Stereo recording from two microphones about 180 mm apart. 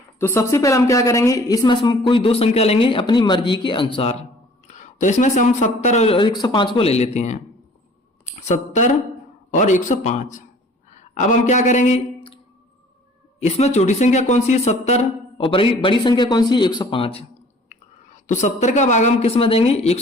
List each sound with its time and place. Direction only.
0.2 s a woman's voice: 15° left (ahead or behind); by 12.4 s 35° left (ahead or behind)
13.4 s speech: 35° left (ahead or behind)